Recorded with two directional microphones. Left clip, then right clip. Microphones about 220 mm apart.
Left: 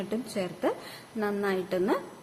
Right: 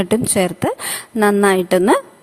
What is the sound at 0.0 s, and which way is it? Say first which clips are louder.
A woman's voice: right 16 dB; 50° right (ahead or behind).